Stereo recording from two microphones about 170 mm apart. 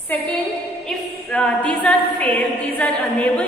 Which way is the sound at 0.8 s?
5° left (ahead or behind).